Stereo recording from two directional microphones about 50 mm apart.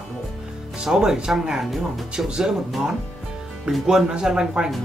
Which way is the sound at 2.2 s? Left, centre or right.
Centre.